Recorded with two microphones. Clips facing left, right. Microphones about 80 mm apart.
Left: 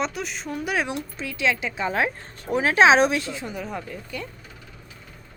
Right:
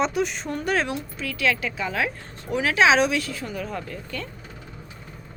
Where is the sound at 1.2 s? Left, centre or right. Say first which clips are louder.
Even; left.